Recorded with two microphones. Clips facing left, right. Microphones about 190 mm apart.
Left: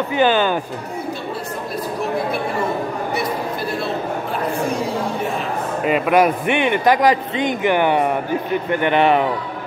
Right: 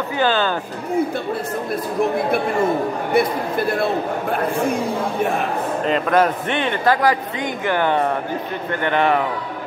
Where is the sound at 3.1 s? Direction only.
55° right (ahead or behind).